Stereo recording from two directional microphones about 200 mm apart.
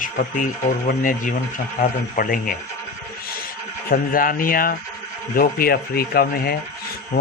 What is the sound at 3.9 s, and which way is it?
Speech, 45° left (ahead or behind).